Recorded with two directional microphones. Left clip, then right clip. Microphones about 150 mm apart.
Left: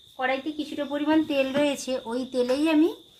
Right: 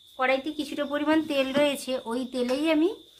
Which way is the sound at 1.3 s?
40° left (ahead or behind).